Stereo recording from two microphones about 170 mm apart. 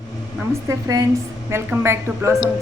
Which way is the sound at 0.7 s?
20° right (ahead or behind).